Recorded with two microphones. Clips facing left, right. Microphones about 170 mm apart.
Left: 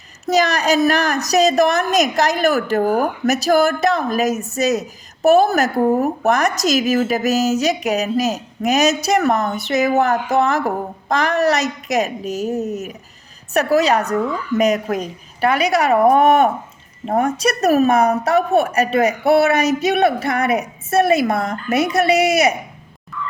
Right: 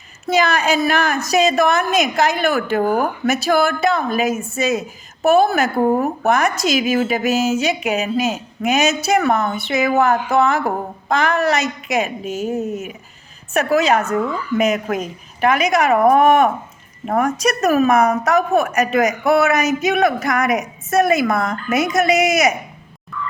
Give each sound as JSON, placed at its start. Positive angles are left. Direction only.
{"t": 0.3, "sound": "a woman's voice", "side_deg": 40}